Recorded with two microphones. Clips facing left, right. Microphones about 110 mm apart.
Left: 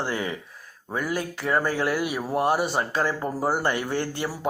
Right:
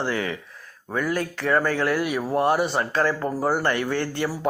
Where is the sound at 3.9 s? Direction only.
30° left (ahead or behind).